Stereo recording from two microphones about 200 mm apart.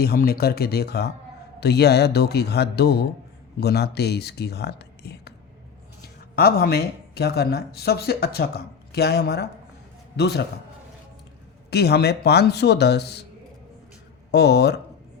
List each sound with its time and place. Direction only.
0.0 s speech: 50° left (ahead or behind)
11.7 s speech: 55° left (ahead or behind)
14.3 s speech: 55° left (ahead or behind)